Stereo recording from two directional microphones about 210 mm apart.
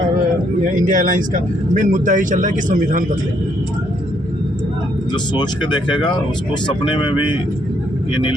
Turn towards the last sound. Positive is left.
turn(degrees=20)  # may be behind; listen again after turning